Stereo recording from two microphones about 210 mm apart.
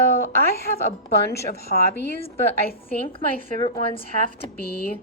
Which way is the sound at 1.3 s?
45° left (ahead or behind).